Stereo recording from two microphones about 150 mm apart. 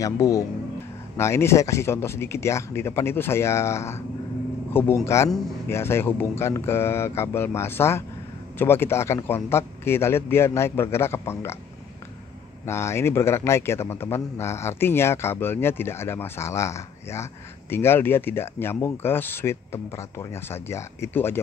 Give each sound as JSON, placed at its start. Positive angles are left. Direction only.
{"t": 0.0, "sound": "a man's voice", "side_deg": 20}
{"t": 12.6, "sound": "a man's voice", "side_deg": 15}